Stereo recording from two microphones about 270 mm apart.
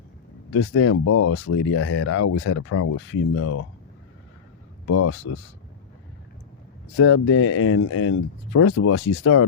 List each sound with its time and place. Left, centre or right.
0.5 s speech: left
4.9 s speech: left
6.9 s speech: left